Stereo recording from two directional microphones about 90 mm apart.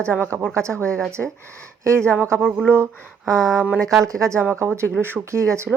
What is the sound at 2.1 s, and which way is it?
Speech, 25° right (ahead or behind).